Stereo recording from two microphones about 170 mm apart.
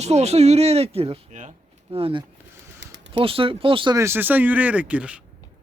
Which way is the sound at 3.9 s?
15° right (ahead or behind).